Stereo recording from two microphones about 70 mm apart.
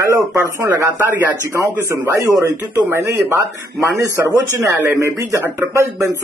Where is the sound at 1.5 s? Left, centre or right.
Right.